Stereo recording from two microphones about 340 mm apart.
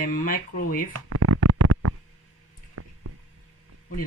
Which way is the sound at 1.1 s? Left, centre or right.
Right.